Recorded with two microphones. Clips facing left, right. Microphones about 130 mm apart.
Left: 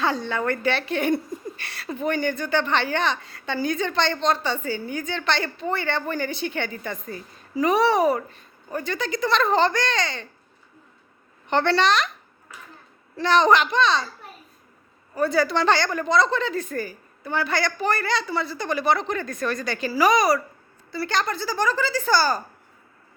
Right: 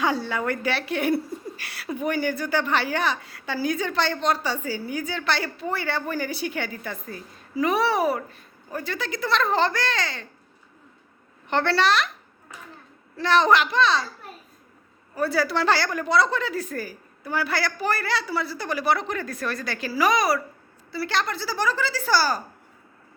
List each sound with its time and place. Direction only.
0.0 s a woman's voice: 10° right (ahead or behind)
11.4 s a woman's voice: centre (ahead or behind)
13.1 s a woman's voice: centre (ahead or behind)
15.1 s a woman's voice: 5° right (ahead or behind)